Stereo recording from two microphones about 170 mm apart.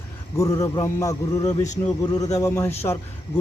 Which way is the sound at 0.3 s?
20° left (ahead or behind).